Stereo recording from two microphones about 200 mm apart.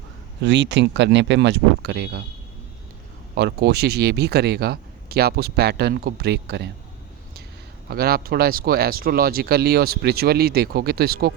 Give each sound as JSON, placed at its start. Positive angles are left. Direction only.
{"t": 0.4, "sound": "speech", "side_deg": -65}
{"t": 3.3, "sound": "speech", "side_deg": -55}
{"t": 7.9, "sound": "speech", "side_deg": -50}